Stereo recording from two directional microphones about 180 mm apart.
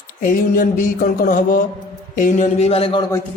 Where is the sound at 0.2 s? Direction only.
50° left (ahead or behind); by 3.1 s 30° left (ahead or behind).